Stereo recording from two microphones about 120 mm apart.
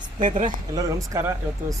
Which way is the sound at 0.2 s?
90° right.